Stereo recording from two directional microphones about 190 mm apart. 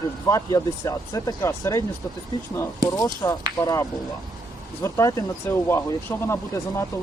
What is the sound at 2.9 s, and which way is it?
Speech, 15° left (ahead or behind).